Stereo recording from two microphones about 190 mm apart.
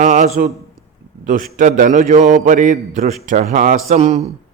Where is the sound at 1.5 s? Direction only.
40° right (ahead or behind).